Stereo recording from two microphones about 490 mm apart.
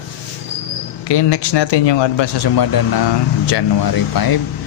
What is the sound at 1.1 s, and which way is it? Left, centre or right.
Speech, left.